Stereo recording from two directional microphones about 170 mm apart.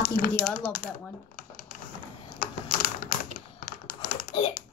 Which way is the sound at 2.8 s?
55° left (ahead or behind).